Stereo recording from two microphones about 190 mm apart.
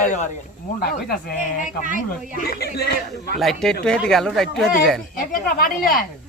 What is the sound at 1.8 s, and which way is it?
Speech, 45° right (ahead or behind).